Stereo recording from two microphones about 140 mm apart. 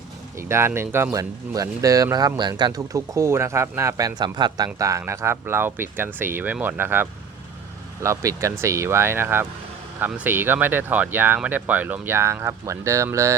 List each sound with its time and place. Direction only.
0.4 s speech: 20° right (ahead or behind)